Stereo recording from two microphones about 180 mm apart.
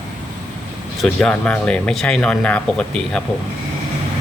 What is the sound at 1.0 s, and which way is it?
Speech, 5° left (ahead or behind).